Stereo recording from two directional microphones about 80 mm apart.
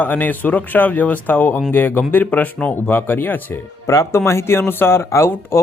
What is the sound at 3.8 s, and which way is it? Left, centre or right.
Speech, left.